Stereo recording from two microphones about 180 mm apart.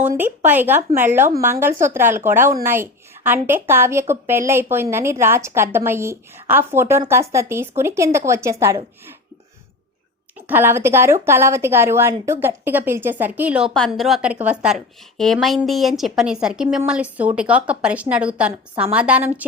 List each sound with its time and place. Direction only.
0.0 s a woman's voice: 10° right (ahead or behind)
10.3 s a woman's voice: 10° right (ahead or behind)